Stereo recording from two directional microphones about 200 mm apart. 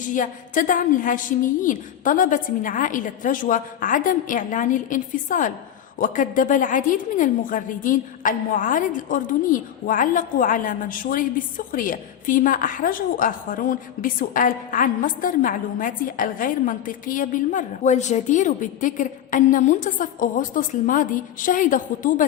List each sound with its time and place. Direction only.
0.0 s a woman's voice: 40° left (ahead or behind)